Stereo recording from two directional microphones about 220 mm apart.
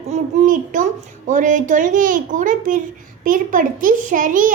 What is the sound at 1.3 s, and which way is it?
A child's voice, 35° right (ahead or behind).